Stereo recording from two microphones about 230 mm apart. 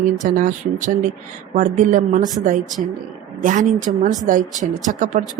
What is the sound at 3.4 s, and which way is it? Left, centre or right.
Speech, right.